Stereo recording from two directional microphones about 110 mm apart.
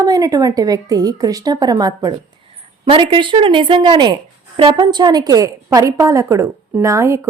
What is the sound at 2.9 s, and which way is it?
A woman's voice, 50° right (ahead or behind).